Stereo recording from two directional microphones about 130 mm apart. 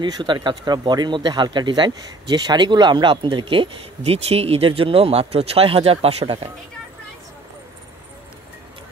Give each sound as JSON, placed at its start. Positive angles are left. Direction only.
{"t": 0.0, "sound": "speech", "side_deg": -35}